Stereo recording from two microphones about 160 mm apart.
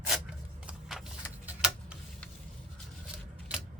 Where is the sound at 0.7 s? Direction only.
Centre (ahead or behind).